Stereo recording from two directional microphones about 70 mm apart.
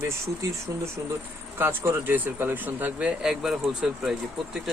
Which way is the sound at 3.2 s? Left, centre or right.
Centre.